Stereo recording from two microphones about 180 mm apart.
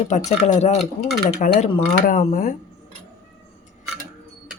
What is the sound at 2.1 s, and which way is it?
Cutlery, 40° left (ahead or behind).